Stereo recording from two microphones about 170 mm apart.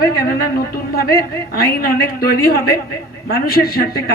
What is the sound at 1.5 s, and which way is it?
A woman's voice, 65° left (ahead or behind).